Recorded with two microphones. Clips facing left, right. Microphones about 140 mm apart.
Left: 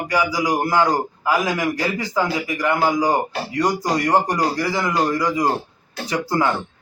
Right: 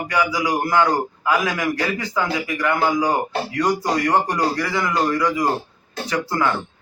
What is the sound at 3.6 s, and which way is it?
Speech, centre (ahead or behind).